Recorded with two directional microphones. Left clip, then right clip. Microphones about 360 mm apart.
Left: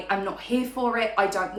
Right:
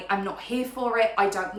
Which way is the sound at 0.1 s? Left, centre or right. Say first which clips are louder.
Left 1 dB; centre.